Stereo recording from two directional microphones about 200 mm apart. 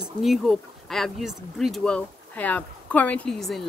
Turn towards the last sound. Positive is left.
turn(degrees=0)  # may be behind; listen again after turning